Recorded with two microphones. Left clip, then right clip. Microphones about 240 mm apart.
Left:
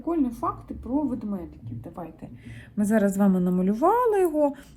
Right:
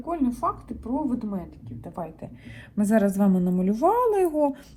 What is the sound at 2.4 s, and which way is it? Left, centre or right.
Speech, centre.